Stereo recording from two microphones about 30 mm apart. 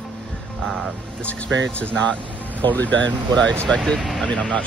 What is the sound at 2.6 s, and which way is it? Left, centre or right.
Speech, left.